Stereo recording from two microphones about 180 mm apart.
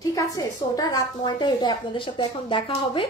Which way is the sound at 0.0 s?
20° left (ahead or behind).